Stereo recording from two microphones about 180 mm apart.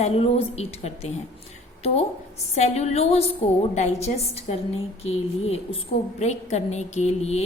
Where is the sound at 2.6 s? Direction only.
40° left (ahead or behind).